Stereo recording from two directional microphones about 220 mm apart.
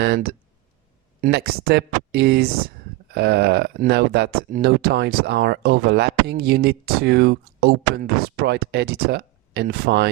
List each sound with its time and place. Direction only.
0.0 s speech: 45° right (ahead or behind)